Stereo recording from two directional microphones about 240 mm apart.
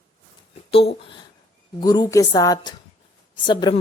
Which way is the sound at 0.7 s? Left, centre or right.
Left.